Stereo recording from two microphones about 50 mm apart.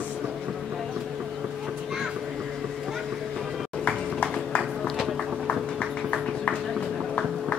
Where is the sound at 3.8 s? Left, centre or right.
Left.